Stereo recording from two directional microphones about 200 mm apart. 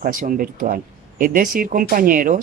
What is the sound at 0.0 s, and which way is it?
Speech, 40° right (ahead or behind).